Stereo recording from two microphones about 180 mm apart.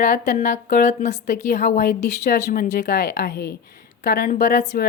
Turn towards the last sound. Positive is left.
turn(degrees=65)  # may be behind; listen again after turning